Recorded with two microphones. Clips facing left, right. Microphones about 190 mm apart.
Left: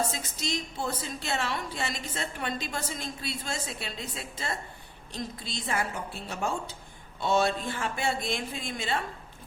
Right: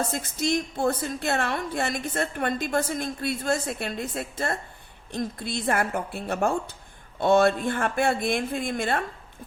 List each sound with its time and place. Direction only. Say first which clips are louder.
0.1 s a woman's voice: right 8 dB; 55° right (ahead or behind)